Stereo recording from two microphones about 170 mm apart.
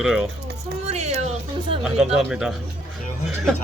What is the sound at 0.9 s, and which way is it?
Music, 40° right (ahead or behind).